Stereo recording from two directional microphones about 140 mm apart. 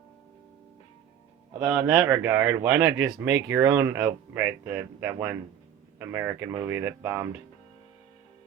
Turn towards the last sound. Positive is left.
turn(degrees=-15)  # may be behind; listen again after turning